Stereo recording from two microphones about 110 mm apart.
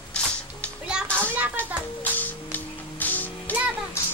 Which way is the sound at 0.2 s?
10° left (ahead or behind).